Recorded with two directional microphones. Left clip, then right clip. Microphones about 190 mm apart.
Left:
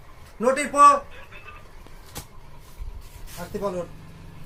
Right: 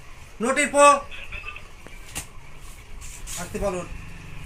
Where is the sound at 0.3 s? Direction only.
40° left (ahead or behind).